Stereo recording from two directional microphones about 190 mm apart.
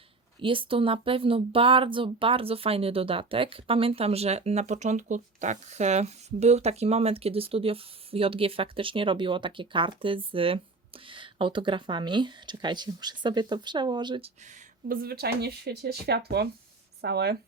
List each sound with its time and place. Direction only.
0.3 s speech: 25° right (ahead or behind)
14.8 s speech: 55° right (ahead or behind)